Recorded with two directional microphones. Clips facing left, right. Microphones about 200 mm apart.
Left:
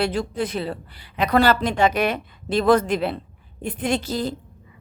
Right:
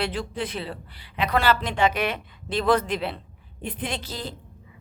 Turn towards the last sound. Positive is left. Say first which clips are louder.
# left 8 dB
turn(degrees=45)  # may be behind; listen again after turning